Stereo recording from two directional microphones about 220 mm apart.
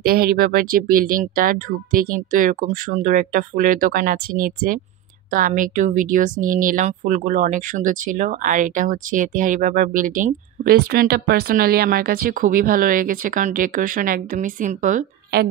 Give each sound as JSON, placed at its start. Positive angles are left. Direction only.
{"t": 0.0, "sound": "a woman's voice", "side_deg": -40}